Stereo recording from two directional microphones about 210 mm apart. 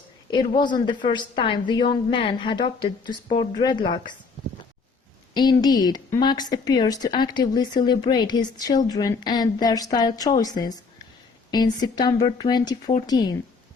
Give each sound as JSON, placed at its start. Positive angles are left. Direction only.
{"t": 0.3, "sound": "a woman's voice", "side_deg": 20}
{"t": 5.3, "sound": "a woman's voice", "side_deg": 20}